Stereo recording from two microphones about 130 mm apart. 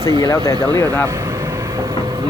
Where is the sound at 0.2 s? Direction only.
25° left (ahead or behind).